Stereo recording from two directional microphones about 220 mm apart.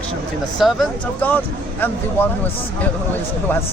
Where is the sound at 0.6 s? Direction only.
5° left (ahead or behind).